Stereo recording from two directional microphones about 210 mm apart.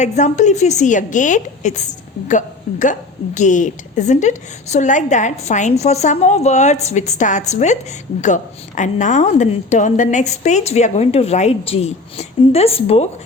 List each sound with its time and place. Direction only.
0.0 s a woman's voice: 35° left (ahead or behind)